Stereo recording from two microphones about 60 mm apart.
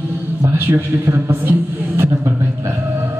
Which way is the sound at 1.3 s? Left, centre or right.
Right.